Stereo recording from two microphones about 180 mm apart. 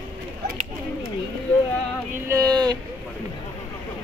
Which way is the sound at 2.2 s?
20° right (ahead or behind).